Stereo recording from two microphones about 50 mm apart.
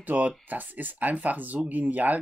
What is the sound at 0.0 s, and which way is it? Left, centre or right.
Speech, right.